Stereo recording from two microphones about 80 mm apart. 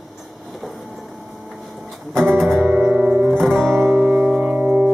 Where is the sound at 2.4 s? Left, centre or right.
Centre.